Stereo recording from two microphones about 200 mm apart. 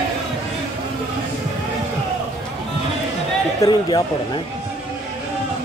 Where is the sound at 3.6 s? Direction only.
20° left (ahead or behind).